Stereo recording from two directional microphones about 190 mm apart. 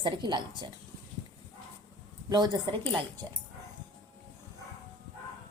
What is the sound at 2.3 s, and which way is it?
A woman's voice, 20° right (ahead or behind).